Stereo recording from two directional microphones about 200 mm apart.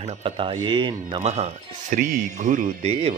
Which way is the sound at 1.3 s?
35° right (ahead or behind).